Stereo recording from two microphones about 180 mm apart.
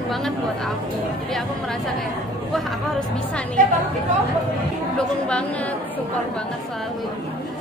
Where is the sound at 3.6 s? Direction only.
45° right (ahead or behind).